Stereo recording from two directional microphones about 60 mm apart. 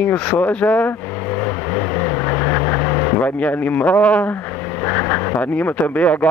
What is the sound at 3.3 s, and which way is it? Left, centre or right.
Speech, left.